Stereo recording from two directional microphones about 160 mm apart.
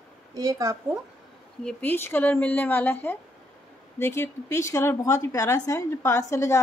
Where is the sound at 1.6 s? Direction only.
10° left (ahead or behind).